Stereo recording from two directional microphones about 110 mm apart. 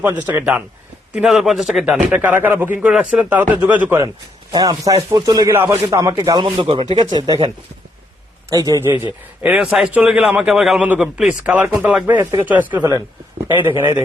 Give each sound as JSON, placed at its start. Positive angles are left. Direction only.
{"t": 0.3, "sound": "speech", "side_deg": -25}
{"t": 1.1, "sound": "a man's voice", "side_deg": -5}
{"t": 2.1, "sound": "a man's voice", "side_deg": -15}
{"t": 4.5, "sound": "speech", "side_deg": -35}
{"t": 5.5, "sound": "speech", "side_deg": -20}
{"t": 6.6, "sound": "speech", "side_deg": -55}
{"t": 6.9, "sound": "speech", "side_deg": -40}
{"t": 8.4, "sound": "speech", "side_deg": -30}
{"t": 8.9, "sound": "a man's voice", "side_deg": -15}
{"t": 10.8, "sound": "a man's voice", "side_deg": -15}